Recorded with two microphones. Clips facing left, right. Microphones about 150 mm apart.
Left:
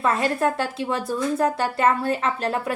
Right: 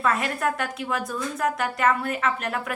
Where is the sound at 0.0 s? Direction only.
30° left (ahead or behind).